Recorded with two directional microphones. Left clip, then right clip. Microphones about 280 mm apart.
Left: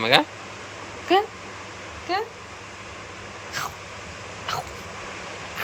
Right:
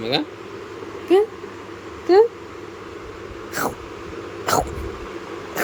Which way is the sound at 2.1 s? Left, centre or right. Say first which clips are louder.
Right 12 dB; centre.